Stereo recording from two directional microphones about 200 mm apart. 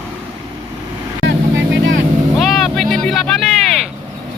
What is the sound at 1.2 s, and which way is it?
Vehicle, 65° right (ahead or behind).